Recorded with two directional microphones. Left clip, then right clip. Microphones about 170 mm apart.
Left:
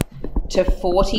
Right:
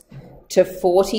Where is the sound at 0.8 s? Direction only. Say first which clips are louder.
Right 2 dB; 20° right (ahead or behind).